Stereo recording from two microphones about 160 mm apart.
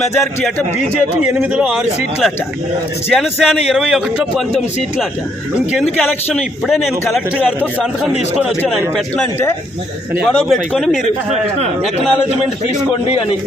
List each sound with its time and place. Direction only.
1.3 s speech: 5° right (ahead or behind)
9.1 s speech: 15° left (ahead or behind)
10.2 s speech: centre (ahead or behind)
11.3 s a man's voice: 40° right (ahead or behind)